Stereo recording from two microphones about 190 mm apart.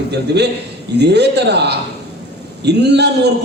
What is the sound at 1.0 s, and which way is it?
Speech, 60° right (ahead or behind).